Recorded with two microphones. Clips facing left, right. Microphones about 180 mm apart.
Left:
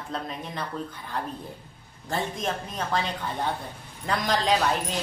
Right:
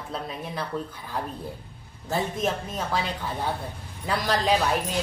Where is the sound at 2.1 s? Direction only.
5° right (ahead or behind).